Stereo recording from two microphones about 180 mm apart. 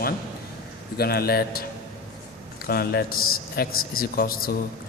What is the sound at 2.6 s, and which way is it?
A man's voice, 55° left (ahead or behind).